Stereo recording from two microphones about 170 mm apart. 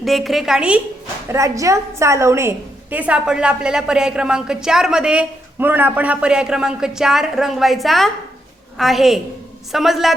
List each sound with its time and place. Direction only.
0.0 s a woman's voice: centre (ahead or behind)
1.3 s a woman's voice: 20° right (ahead or behind); by 10.2 s centre (ahead or behind)